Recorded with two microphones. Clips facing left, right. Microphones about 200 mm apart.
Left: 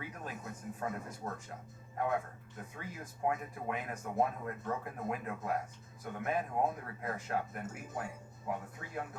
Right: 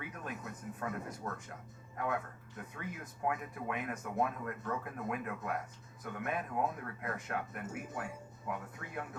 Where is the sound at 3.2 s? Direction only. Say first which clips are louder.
Left 2 dB; 30° left (ahead or behind).